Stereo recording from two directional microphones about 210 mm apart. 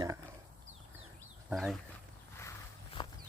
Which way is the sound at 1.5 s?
5° right (ahead or behind).